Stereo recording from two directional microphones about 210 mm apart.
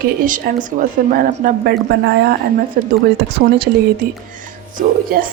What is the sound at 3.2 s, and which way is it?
Speech, 55° right (ahead or behind).